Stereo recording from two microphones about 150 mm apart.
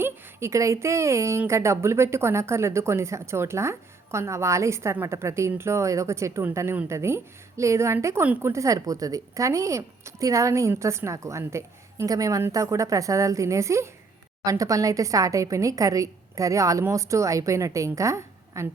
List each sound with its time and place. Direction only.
0.0 s speech: 20° right (ahead or behind)